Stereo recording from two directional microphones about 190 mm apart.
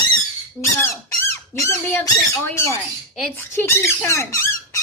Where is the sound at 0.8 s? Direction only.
15° left (ahead or behind).